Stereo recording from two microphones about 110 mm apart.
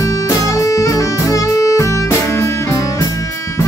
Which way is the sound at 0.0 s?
30° left (ahead or behind).